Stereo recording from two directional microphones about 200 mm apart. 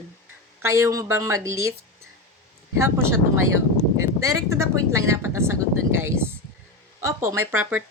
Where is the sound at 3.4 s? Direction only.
90° right.